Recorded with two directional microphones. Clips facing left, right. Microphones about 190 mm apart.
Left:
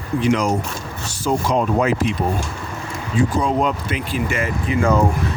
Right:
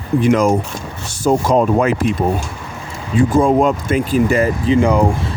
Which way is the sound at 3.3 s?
50° right (ahead or behind).